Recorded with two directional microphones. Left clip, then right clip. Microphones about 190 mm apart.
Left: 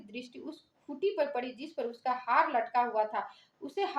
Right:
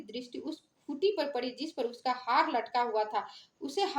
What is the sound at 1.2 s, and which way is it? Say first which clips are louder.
A woman's voice: left 1 dB; 45° right (ahead or behind).